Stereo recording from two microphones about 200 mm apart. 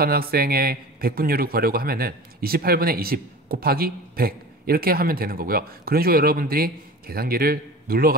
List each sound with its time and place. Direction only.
0.0 s a man's voice: 50° right (ahead or behind)